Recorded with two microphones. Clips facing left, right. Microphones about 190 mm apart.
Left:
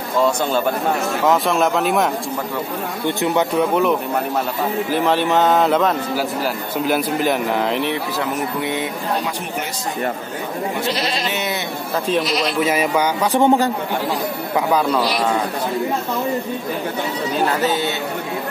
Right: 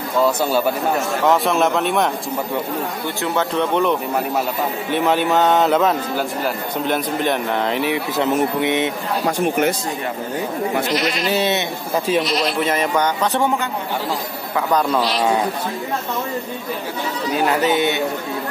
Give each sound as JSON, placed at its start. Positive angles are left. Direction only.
{"t": 0.2, "sound": "a man's voice", "side_deg": -5}
{"t": 3.2, "sound": "speech", "side_deg": 15}
{"t": 4.9, "sound": "a man's voice", "side_deg": 0}
{"t": 8.2, "sound": "speech", "side_deg": -25}
{"t": 10.9, "sound": "sheep", "side_deg": 30}
{"t": 11.2, "sound": "speech", "side_deg": -30}
{"t": 12.1, "sound": "speech", "side_deg": 0}
{"t": 13.4, "sound": "a man's voice", "side_deg": 30}
{"t": 14.7, "sound": "speech", "side_deg": 5}
{"t": 17.6, "sound": "speech", "side_deg": -20}